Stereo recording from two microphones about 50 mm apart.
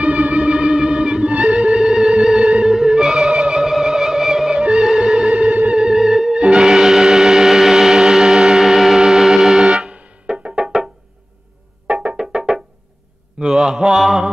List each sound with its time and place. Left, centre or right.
0.0 s music: right
5.8 s music: centre
9.8 s music: right
10.3 s music: centre
11.9 s music: right
12.2 s music: centre
13.5 s mantra: centre